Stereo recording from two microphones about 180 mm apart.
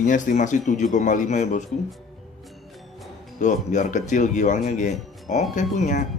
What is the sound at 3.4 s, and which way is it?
A man's voice, 40° left (ahead or behind).